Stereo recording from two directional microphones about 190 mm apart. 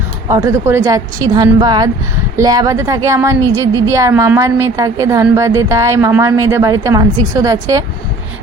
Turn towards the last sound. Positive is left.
turn(degrees=-15)  # may be behind; listen again after turning